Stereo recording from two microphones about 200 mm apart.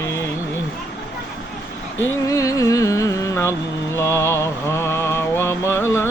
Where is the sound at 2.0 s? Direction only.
15° left (ahead or behind).